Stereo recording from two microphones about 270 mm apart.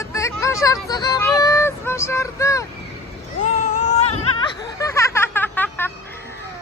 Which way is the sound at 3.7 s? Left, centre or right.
Left.